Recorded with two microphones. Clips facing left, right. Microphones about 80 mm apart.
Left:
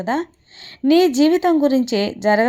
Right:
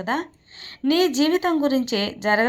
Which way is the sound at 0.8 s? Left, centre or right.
Right.